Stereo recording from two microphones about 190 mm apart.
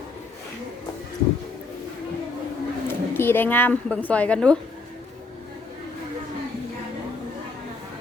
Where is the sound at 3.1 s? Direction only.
10° left (ahead or behind).